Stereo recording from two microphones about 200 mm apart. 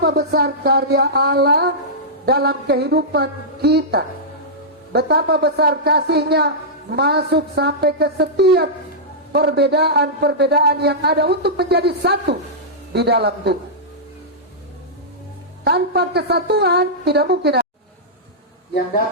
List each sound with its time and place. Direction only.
0.0 s a woman's voice: 50° right (ahead or behind)
15.6 s a man's voice: 55° right (ahead or behind)